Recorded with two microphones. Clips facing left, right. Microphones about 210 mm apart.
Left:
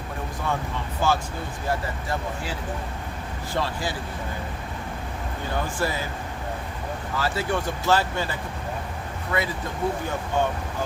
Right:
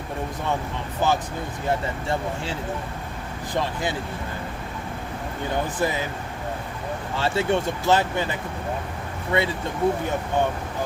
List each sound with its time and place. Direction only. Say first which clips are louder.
1.0 s speech: right 1 dB; 20° right (ahead or behind)
3.5 s speech: right 2 dB; 20° right (ahead or behind)
5.8 s speech: right 2 dB; 20° right (ahead or behind)
7.2 s speech: right 4 dB; 25° right (ahead or behind)